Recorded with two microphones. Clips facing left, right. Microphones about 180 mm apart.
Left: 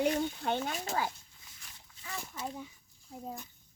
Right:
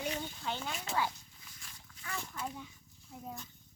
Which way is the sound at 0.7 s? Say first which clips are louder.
Left 1 dB; 40° left (ahead or behind).